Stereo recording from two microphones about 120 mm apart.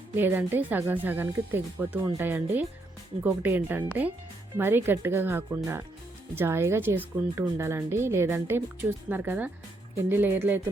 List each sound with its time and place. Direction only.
0.2 s speech: 15° right (ahead or behind)